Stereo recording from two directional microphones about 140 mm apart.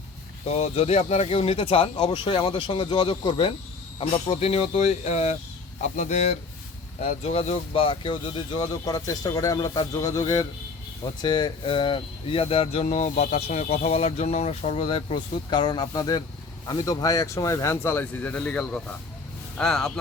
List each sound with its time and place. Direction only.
0.4 s speech: 50° left (ahead or behind)
4.3 s speech: 50° left (ahead or behind); by 19.9 s 5° left (ahead or behind)